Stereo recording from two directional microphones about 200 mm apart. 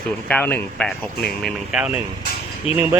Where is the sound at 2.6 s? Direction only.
30° left (ahead or behind).